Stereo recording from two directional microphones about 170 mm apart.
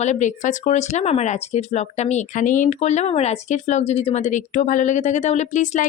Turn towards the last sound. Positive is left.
turn(degrees=45)  # may be behind; listen again after turning